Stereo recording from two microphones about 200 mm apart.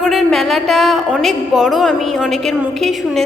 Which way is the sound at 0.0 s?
Centre (ahead or behind).